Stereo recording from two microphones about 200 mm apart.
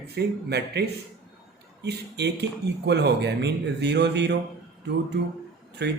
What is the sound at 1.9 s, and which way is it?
Speech, 55° right (ahead or behind).